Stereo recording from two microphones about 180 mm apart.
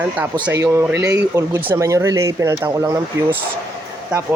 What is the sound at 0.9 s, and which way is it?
Speech, 65° right (ahead or behind).